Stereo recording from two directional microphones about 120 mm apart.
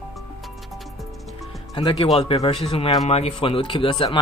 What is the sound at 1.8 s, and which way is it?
Speech, 40° left (ahead or behind).